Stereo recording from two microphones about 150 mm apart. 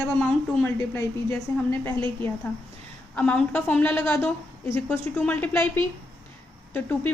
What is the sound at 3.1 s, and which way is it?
A woman's voice, 10° left (ahead or behind).